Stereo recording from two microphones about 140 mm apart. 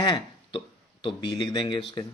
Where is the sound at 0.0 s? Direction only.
35° left (ahead or behind).